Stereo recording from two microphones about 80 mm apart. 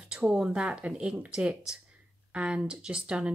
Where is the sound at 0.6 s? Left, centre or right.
Centre.